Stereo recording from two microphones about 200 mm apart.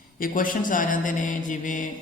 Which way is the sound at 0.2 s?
45° left (ahead or behind).